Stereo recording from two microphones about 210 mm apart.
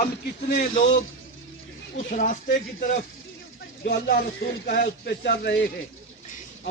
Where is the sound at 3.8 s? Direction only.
50° left (ahead or behind).